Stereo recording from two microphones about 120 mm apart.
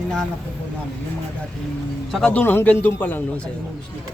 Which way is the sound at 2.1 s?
5° left (ahead or behind).